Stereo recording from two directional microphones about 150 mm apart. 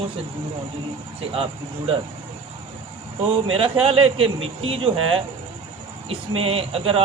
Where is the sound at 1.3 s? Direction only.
40° right (ahead or behind).